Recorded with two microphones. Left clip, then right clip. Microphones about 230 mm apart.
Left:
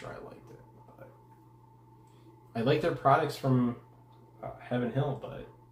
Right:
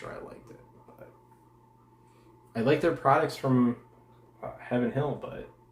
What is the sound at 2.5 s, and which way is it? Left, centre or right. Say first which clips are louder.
Speech: right 3 dB; centre.